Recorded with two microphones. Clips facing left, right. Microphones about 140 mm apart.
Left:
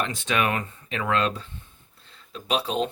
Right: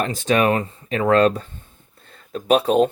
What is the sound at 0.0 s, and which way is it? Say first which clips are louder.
Speech: right 7 dB; 35° right (ahead or behind).